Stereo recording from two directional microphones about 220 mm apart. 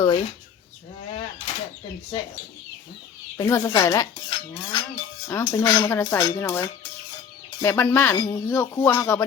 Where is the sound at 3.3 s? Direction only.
15° left (ahead or behind).